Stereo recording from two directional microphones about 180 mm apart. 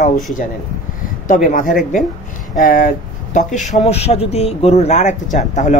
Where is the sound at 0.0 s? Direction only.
45° left (ahead or behind).